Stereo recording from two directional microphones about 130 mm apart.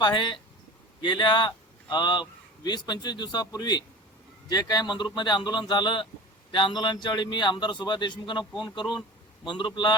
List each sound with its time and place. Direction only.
0.0 s a man's voice: 35° left (ahead or behind)